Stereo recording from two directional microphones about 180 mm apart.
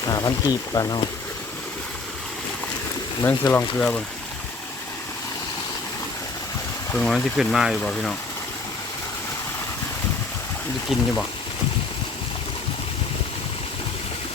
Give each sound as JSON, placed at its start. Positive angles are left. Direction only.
{"t": 0.1, "sound": "speech", "side_deg": 20}
{"t": 3.2, "sound": "speech", "side_deg": 15}
{"t": 6.9, "sound": "speech", "side_deg": 0}
{"t": 10.8, "sound": "speech", "side_deg": 5}